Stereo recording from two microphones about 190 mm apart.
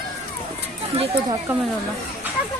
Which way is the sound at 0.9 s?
30° right (ahead or behind).